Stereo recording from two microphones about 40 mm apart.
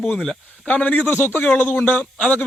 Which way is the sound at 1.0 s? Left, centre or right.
Left.